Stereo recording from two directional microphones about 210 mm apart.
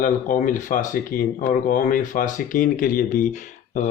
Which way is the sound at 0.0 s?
40° left (ahead or behind).